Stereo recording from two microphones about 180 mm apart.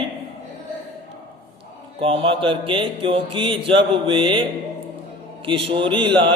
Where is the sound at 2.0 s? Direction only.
30° right (ahead or behind).